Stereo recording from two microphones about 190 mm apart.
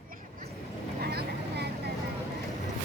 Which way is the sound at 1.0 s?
60° right (ahead or behind).